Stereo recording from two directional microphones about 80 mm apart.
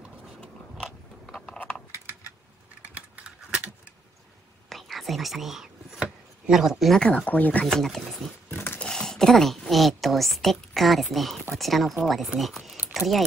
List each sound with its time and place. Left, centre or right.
0.7 s a sound: centre
2.9 s typing: centre
4.6 s whispering: centre
7.0 s speech: centre
7.6 s speech: centre
8.5 s dog: left
8.8 s a woman's voice: centre